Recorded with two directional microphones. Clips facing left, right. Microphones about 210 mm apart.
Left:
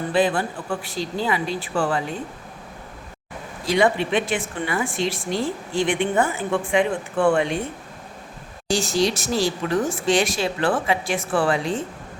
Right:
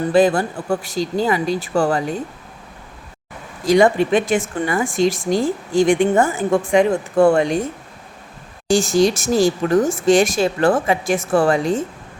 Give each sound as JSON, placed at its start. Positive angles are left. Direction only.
{"t": 0.1, "sound": "speech", "side_deg": -45}
{"t": 3.7, "sound": "speech", "side_deg": -45}
{"t": 8.7, "sound": "speech", "side_deg": -45}